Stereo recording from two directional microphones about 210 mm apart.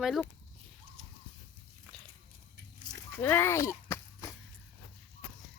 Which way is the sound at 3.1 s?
10° left (ahead or behind).